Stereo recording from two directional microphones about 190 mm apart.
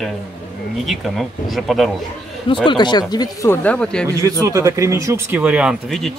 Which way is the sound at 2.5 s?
25° left (ahead or behind).